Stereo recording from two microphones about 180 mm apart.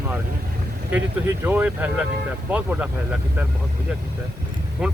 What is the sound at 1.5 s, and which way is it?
Speech, 10° right (ahead or behind).